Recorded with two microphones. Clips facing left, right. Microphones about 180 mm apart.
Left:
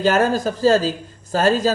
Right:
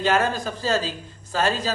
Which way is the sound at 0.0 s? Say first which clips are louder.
Left 5 dB; 40° left (ahead or behind).